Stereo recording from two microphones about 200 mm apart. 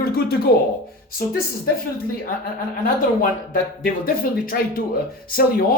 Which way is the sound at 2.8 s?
45° left (ahead or behind).